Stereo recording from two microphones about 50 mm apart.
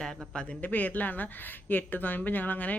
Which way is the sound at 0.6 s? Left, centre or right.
Left.